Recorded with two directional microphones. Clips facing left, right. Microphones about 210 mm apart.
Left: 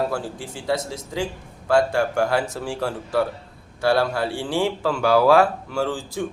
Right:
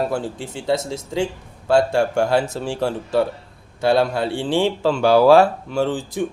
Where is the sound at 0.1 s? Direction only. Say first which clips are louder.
Right 3 dB; 25° right (ahead or behind).